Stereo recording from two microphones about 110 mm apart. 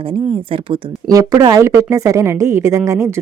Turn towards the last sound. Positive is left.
turn(degrees=-25)  # may be behind; listen again after turning